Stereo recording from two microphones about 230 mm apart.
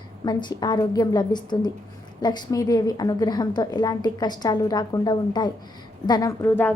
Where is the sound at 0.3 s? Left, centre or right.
Centre.